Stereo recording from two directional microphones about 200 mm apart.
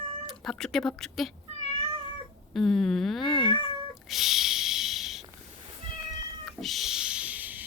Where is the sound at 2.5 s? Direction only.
Centre (ahead or behind).